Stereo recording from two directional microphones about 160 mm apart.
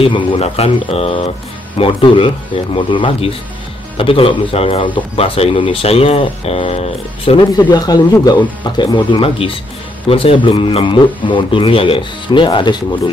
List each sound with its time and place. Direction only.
0.0 s speech: 35° left (ahead or behind)
7.5 s speech: 25° left (ahead or behind)